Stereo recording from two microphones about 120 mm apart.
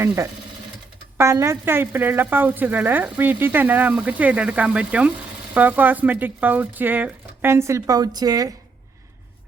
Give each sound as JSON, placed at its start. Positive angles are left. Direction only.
{"t": 1.2, "sound": "a woman's voice", "side_deg": -25}